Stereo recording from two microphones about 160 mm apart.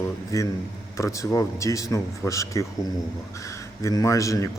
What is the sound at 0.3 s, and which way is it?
A man's voice, 20° left (ahead or behind).